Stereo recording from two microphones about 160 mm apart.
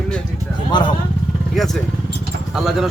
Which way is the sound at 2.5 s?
5° right (ahead or behind).